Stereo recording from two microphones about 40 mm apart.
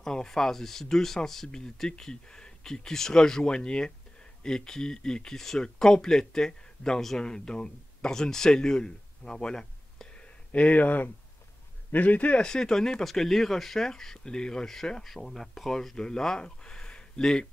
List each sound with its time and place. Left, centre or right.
0.0 s speech: centre; by 12.4 s left
12.4 s speech: centre